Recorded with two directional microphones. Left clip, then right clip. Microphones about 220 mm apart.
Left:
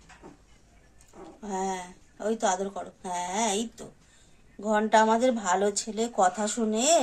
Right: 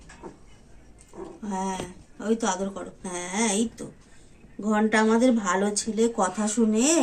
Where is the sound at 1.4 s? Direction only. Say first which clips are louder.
Even; 20° left (ahead or behind).